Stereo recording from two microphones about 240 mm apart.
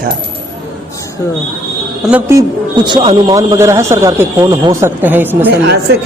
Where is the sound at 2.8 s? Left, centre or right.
Centre.